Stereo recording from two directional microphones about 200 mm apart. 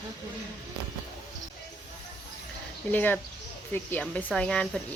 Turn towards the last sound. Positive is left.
turn(degrees=5)  # may be behind; listen again after turning